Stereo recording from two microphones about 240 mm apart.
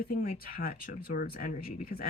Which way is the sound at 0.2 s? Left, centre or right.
Left.